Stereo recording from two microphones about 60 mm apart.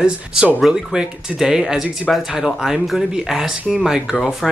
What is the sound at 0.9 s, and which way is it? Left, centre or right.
Speech, centre.